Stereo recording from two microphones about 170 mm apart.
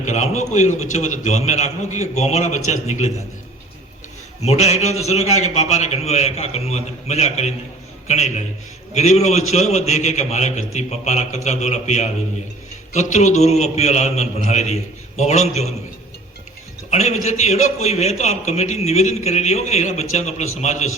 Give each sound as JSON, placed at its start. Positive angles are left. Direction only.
{"t": 0.0, "sound": "a man's voice", "side_deg": 45}
{"t": 4.4, "sound": "a man's voice", "side_deg": 40}
{"t": 16.9, "sound": "a man's voice", "side_deg": 40}